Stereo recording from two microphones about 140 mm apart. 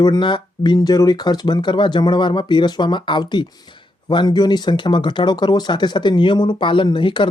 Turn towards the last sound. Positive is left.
turn(degrees=35)  # may be behind; listen again after turning